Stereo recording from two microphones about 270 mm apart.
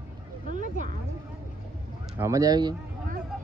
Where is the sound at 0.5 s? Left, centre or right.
Right.